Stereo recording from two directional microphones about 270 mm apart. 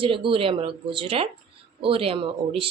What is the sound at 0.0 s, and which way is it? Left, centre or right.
A woman's voice, centre.